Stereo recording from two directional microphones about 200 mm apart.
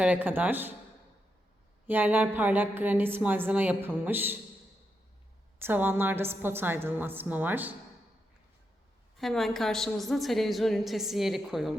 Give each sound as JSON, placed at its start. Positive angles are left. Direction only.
{"t": 0.0, "sound": "a woman's voice", "side_deg": -10}
{"t": 1.9, "sound": "a woman's voice", "side_deg": -10}
{"t": 5.5, "sound": "a woman's voice", "side_deg": -10}
{"t": 9.1, "sound": "a woman's voice", "side_deg": 0}